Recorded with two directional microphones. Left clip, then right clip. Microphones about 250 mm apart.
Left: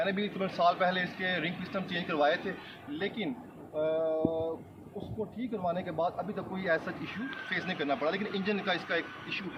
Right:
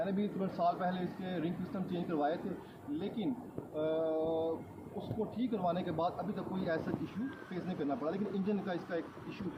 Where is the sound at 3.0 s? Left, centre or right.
Centre.